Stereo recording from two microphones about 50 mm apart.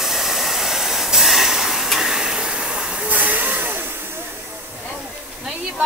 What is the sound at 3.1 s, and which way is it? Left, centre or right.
Hiss, right.